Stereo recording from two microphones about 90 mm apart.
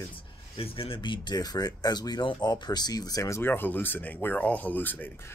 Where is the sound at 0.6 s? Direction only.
90° left.